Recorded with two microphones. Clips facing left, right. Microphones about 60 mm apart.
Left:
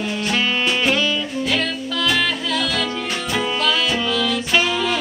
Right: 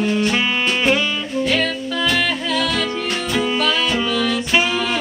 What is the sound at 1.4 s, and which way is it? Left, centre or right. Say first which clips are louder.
Music: right 6 dB; centre.